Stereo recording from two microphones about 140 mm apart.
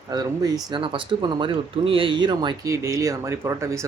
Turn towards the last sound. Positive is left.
turn(degrees=-20)  # may be behind; listen again after turning